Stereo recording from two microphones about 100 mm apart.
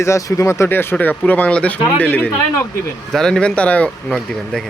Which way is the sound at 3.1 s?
5° left (ahead or behind).